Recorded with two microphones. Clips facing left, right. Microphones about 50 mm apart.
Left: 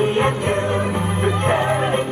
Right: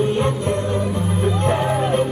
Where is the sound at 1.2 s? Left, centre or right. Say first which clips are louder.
Left 1 dB; left.